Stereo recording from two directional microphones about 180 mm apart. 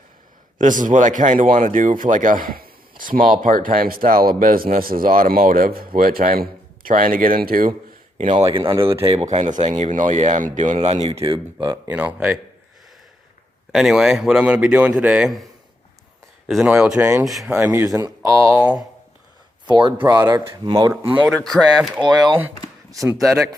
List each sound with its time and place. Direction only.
0.6 s speech: 45° right (ahead or behind)
8.2 s speech: 35° right (ahead or behind)
11.2 s speech: 20° right (ahead or behind)
11.9 s speech: 10° right (ahead or behind)
13.7 s a man's voice: centre (ahead or behind)
16.5 s a man's voice: 5° right (ahead or behind)
17.6 s speech: 10° right (ahead or behind)
19.6 s speech: 25° right (ahead or behind)
21.1 s a man's voice: 10° right (ahead or behind)